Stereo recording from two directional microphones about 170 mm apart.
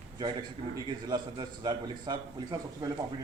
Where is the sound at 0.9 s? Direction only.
25° right (ahead or behind).